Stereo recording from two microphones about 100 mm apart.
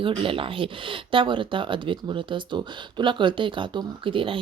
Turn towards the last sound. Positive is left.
turn(degrees=-60)  # may be behind; listen again after turning